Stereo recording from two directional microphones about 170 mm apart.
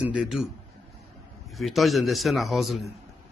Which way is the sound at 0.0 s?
5° right (ahead or behind).